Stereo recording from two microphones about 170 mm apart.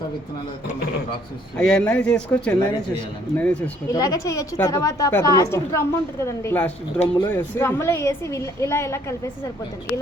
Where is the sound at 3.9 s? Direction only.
20° left (ahead or behind).